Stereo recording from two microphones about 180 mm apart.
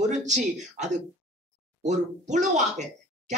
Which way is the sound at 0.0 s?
40° right (ahead or behind).